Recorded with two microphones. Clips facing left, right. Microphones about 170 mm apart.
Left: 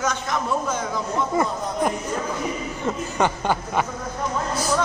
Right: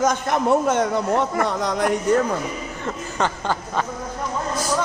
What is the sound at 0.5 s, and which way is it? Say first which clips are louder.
Speech: right 11 dB; 65° right (ahead or behind).